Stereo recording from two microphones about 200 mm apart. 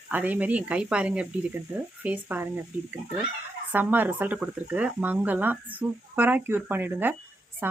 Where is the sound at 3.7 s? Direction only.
10° right (ahead or behind).